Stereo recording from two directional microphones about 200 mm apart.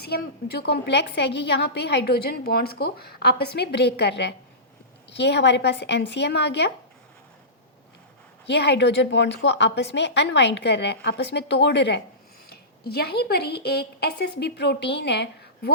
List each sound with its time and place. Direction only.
0.0 s a woman's voice: 55° left (ahead or behind)
8.4 s a woman's voice: 60° left (ahead or behind)